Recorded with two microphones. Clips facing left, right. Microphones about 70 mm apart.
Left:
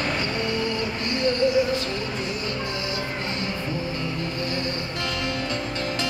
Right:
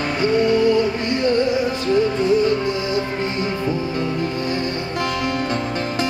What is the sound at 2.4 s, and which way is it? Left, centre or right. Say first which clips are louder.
Music: right 9 dB; right.